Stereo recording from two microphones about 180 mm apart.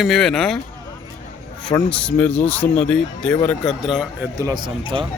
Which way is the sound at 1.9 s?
5° left (ahead or behind).